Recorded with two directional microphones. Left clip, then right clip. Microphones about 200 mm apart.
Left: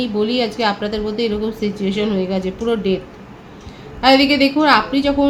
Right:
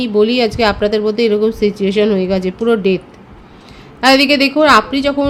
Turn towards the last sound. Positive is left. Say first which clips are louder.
# right 3 dB
turn(degrees=-55)  # may be behind; listen again after turning